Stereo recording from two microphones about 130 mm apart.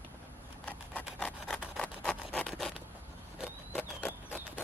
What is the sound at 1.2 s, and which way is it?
Rub, 5° left (ahead or behind).